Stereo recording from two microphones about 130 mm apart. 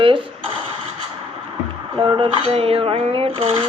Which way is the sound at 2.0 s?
40° right (ahead or behind).